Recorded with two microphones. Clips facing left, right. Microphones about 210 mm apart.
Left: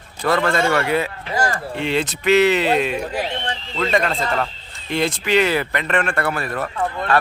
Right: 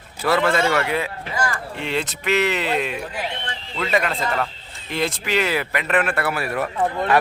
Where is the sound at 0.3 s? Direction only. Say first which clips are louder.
Even; 5° right (ahead or behind).